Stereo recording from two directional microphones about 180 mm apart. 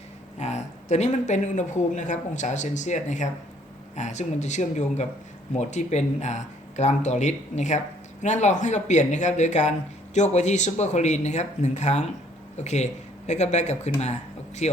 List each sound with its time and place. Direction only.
0.3 s speech: 40° left (ahead or behind)